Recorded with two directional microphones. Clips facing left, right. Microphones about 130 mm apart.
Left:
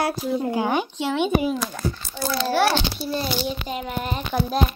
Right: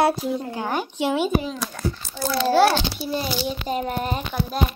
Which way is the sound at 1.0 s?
10° right (ahead or behind).